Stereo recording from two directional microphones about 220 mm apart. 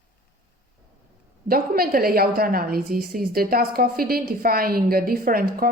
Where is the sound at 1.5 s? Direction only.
40° right (ahead or behind).